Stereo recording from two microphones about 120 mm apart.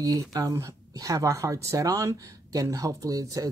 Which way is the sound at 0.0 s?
30° right (ahead or behind).